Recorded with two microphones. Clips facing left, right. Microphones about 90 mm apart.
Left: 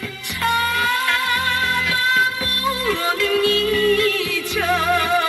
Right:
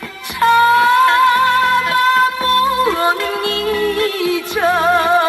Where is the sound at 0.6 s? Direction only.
55° right (ahead or behind).